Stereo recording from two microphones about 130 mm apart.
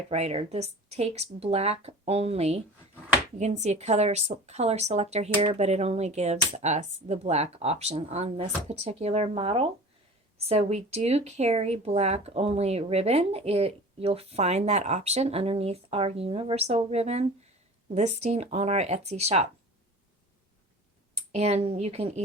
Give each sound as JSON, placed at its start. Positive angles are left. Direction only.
{"t": 0.1, "sound": "speech", "side_deg": -55}
{"t": 21.2, "sound": "speech", "side_deg": -50}